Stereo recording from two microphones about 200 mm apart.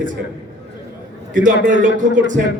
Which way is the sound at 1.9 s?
40° right (ahead or behind).